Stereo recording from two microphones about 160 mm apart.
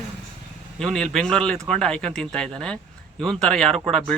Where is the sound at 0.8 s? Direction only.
5° left (ahead or behind).